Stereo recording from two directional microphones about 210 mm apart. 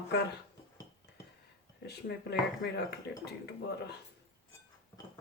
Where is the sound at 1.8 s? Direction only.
50° left (ahead or behind).